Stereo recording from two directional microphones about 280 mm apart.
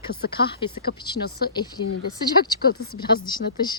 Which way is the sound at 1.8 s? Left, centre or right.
Left.